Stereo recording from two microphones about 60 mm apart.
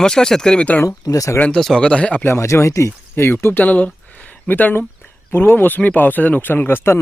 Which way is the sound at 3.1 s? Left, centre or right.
Left.